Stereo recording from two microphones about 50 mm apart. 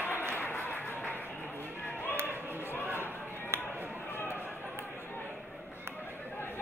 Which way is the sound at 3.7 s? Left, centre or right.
Right.